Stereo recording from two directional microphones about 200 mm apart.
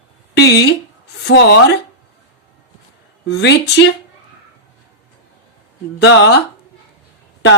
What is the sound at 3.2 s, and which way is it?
Speech, 60° left (ahead or behind).